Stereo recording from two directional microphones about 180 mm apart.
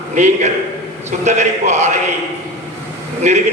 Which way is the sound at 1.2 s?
40° right (ahead or behind).